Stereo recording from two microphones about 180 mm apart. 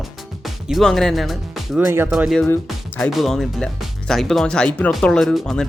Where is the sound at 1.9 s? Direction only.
15° right (ahead or behind).